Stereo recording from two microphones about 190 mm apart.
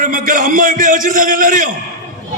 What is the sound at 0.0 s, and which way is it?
A man's voice, 45° right (ahead or behind).